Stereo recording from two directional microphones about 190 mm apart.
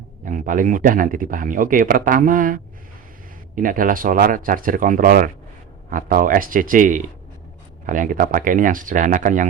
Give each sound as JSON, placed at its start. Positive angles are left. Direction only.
{"t": 0.3, "sound": "speech", "side_deg": -45}